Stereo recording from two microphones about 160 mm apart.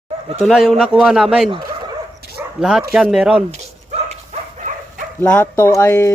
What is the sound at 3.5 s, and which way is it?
Dog, 40° right (ahead or behind).